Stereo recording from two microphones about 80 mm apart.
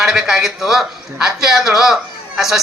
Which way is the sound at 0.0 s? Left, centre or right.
Centre.